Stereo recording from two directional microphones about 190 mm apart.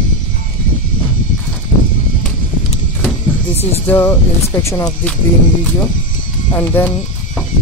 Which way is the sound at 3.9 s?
10° left (ahead or behind).